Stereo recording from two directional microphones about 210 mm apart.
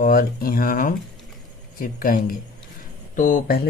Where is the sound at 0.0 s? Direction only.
45° left (ahead or behind).